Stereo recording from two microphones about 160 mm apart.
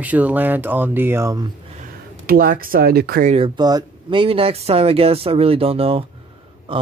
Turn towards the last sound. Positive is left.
turn(degrees=-30)  # may be behind; listen again after turning